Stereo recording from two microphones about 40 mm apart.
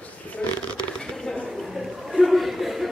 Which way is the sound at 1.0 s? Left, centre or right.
Centre.